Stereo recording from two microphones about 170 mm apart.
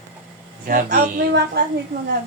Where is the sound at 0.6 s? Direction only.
60° right (ahead or behind).